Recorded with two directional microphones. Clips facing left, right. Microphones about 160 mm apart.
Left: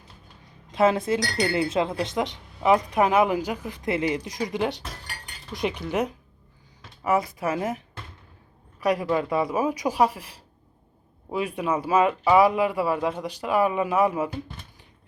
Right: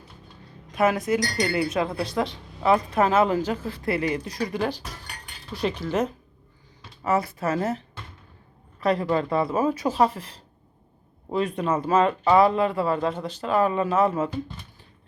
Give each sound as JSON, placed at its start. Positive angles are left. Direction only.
{"t": 0.7, "sound": "speech", "side_deg": 25}